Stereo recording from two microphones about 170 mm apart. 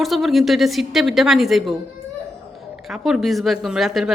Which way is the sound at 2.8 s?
Centre (ahead or behind).